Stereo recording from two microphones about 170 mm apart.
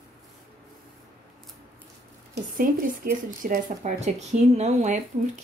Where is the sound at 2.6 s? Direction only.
60° right (ahead or behind); by 5.0 s 40° right (ahead or behind).